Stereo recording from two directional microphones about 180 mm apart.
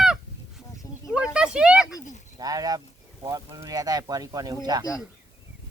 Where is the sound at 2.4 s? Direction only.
20° right (ahead or behind).